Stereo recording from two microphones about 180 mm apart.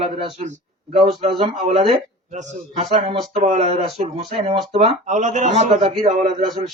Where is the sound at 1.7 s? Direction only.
35° right (ahead or behind).